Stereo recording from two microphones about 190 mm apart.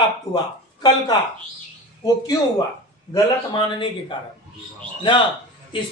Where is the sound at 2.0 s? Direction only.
20° left (ahead or behind).